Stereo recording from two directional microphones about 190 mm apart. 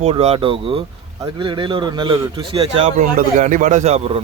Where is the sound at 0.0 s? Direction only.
35° right (ahead or behind).